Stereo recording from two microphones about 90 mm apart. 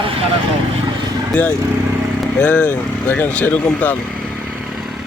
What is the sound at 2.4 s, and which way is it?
Speech, 15° left (ahead or behind).